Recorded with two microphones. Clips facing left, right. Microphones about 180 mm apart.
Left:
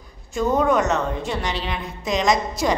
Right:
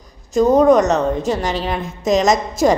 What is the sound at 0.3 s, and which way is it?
A woman's voice, 40° right (ahead or behind).